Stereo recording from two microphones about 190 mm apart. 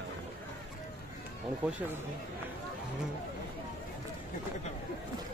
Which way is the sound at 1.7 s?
10° right (ahead or behind).